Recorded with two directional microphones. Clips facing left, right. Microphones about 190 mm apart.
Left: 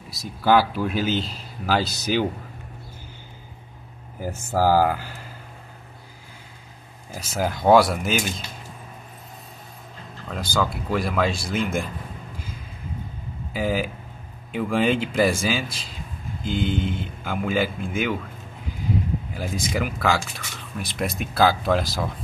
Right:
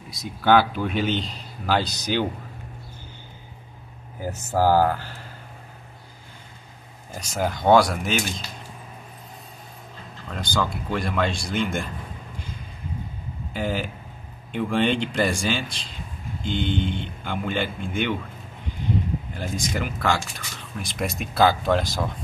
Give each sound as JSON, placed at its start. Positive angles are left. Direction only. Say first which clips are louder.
{"t": 0.2, "sound": "speech", "louder": "even", "side_deg": 0}
{"t": 4.2, "sound": "speech", "louder": "even", "side_deg": 10}
{"t": 7.1, "sound": "speech", "louder": "even", "side_deg": 5}
{"t": 10.2, "sound": "speech", "louder": "left 1 dB", "side_deg": 0}
{"t": 13.5, "sound": "speech", "louder": "left 3 dB", "side_deg": 5}
{"t": 19.3, "sound": "speech", "louder": "left 2 dB", "side_deg": 5}